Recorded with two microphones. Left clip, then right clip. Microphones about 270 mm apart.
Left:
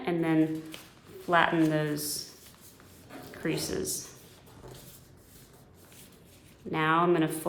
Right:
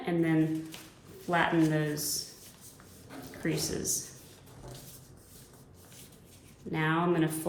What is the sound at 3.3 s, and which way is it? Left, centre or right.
Speech, left.